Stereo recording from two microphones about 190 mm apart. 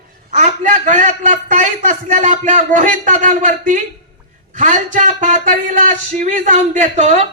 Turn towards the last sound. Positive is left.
turn(degrees=-40)  # may be behind; listen again after turning